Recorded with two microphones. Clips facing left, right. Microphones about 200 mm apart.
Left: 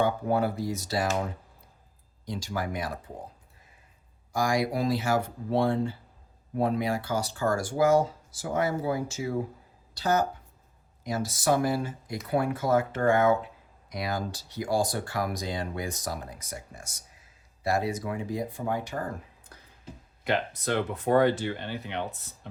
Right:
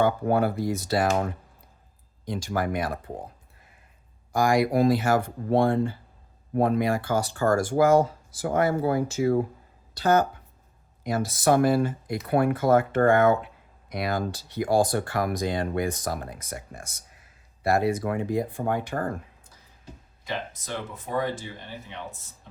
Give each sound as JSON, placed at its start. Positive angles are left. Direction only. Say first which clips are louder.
{"t": 0.0, "sound": "speech", "louder": "right 3 dB", "side_deg": -60}
{"t": 4.3, "sound": "speech", "louder": "right 5 dB", "side_deg": -55}
{"t": 20.2, "sound": "speech", "louder": "left 6 dB", "side_deg": 65}